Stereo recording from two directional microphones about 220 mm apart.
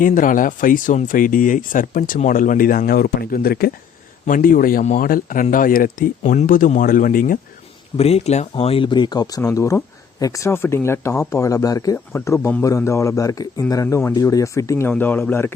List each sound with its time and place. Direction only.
0.0 s speech: 35° left (ahead or behind)
7.9 s speech: 25° left (ahead or behind); by 15.5 s 10° left (ahead or behind)